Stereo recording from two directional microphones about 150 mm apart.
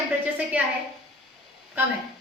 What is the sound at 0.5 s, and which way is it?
Speech, 10° right (ahead or behind).